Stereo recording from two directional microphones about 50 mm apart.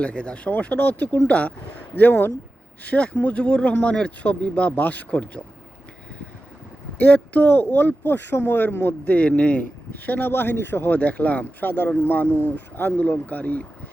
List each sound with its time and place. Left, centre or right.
0.0 s speech: left
2.0 s speech: left
2.9 s speech: left
7.0 s speech: left
9.1 s speech: left
9.9 s speech: left